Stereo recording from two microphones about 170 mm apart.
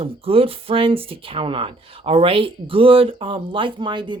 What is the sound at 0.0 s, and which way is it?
Speech, 35° right (ahead or behind).